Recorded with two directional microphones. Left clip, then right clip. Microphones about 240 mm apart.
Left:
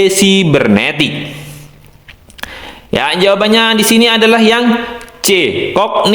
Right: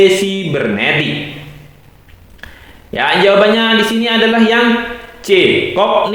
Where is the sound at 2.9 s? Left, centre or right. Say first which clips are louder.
Right 1 dB; left.